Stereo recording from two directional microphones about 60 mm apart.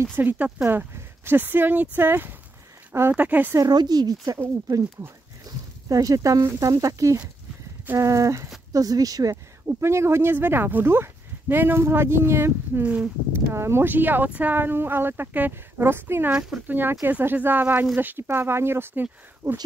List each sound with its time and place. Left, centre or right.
0.1 s speech: right
3.2 s a woman's voice: right
3.5 s a woman's voice: right
5.5 s a sound: right
5.9 s speech: right
8.0 s a sound: right
8.7 s speech: right
9.7 s speech: right
12.8 s a woman's voice: right
13.3 s speech: right
13.8 s speech: right
16.3 s speech: centre
16.6 s speech: right